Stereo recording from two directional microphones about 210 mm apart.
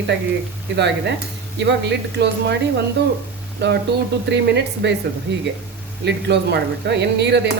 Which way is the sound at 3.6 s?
55° right (ahead or behind).